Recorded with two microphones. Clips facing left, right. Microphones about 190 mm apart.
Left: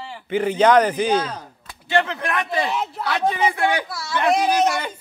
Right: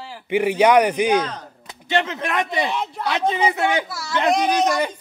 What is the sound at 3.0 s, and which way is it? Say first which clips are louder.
Speech: right 1 dB; 20° right (ahead or behind).